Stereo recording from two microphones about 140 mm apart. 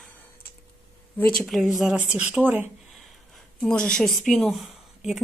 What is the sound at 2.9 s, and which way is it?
A woman's voice, centre (ahead or behind).